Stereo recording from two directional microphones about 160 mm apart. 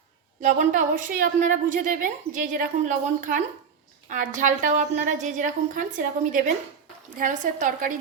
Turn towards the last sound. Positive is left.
turn(degrees=-55)  # may be behind; listen again after turning